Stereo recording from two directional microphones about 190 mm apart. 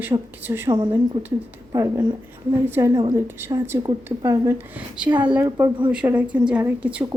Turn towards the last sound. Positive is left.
turn(degrees=-10)  # may be behind; listen again after turning